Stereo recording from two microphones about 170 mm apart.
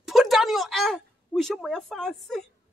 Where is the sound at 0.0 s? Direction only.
Centre (ahead or behind).